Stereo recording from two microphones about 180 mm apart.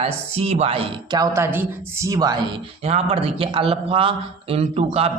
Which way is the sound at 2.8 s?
35° right (ahead or behind).